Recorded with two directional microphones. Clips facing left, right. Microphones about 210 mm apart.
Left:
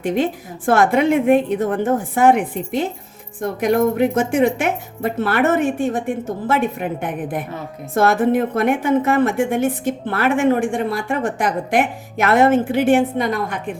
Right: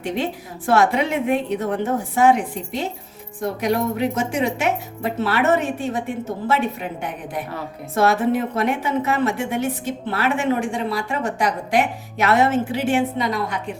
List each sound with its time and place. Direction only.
0.0 s a woman's voice: 50° left (ahead or behind)